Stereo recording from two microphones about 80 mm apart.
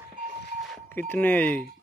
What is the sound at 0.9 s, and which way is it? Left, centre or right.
Speech, left.